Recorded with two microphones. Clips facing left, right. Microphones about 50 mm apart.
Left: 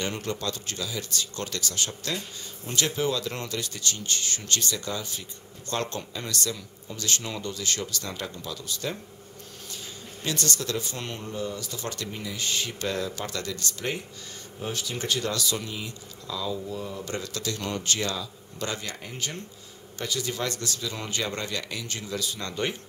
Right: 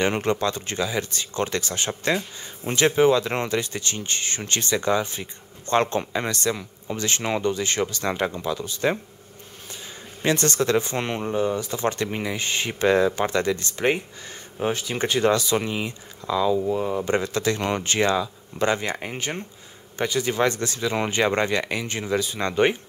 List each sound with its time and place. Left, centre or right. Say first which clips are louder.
0.0 s speech: right 8 dB; right
10.2 s speech: right 8 dB; right